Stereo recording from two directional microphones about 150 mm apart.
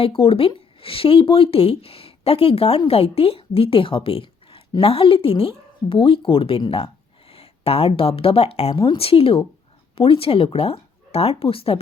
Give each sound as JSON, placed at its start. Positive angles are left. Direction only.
{"t": 0.0, "sound": "speech", "side_deg": 40}